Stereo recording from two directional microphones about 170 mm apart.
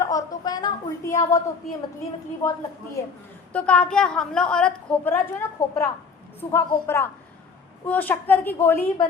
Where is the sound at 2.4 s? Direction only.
15° left (ahead or behind).